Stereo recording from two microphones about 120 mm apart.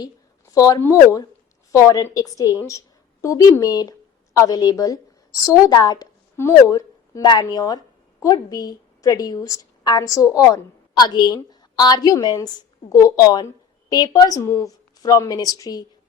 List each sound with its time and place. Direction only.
0.5 s a woman's voice: 30° left (ahead or behind)